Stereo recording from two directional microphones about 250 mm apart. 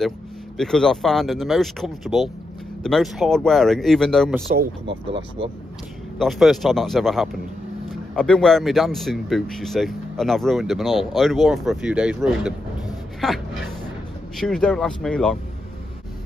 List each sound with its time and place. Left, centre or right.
0.6 s speech: centre
4.8 s speech: right
6.1 s speech: centre